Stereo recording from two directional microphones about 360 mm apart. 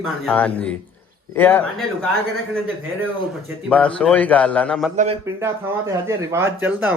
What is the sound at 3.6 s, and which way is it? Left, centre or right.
A man's voice, centre.